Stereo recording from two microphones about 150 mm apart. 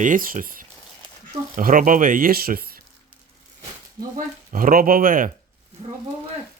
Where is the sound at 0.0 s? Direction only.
65° right (ahead or behind); by 2.7 s 85° right.